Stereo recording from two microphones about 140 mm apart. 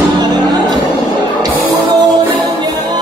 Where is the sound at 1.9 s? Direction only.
30° right (ahead or behind).